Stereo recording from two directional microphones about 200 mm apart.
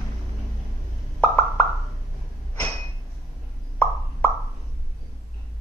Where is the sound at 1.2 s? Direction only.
10° left (ahead or behind).